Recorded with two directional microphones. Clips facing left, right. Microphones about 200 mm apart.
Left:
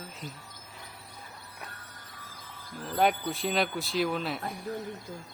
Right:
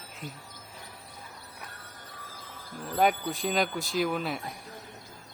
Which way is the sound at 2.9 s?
Centre (ahead or behind).